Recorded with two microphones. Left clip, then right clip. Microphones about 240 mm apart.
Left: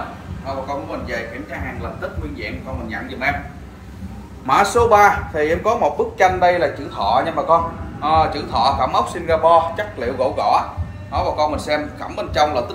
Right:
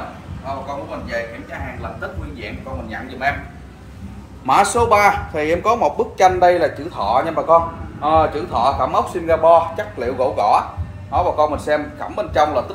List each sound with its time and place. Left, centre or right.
4.5 s a man's voice: right